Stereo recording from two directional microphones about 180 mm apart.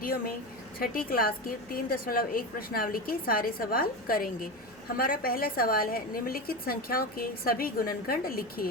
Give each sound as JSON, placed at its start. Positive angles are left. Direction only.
{"t": 0.0, "sound": "a woman's voice", "side_deg": 55}